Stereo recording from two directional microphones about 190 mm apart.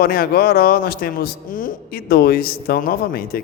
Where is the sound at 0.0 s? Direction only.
50° left (ahead or behind).